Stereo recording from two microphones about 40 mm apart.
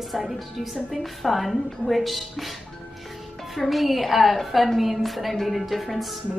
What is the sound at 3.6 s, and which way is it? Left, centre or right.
A woman's voice, centre.